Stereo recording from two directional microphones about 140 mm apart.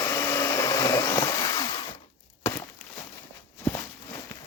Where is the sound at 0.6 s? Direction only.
20° left (ahead or behind).